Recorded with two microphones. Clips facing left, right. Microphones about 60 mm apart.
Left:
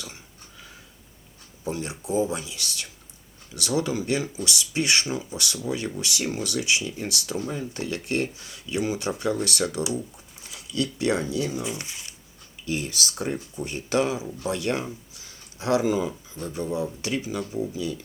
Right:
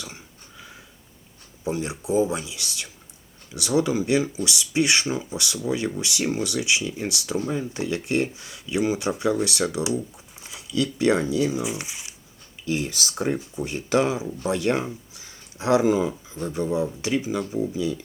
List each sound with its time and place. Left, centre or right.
1.6 s speech: right
12.6 s speech: right
15.1 s a sound: right
16.6 s speech: right